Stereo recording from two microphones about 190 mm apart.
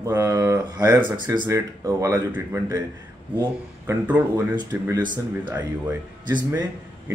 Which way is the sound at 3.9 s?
10° right (ahead or behind).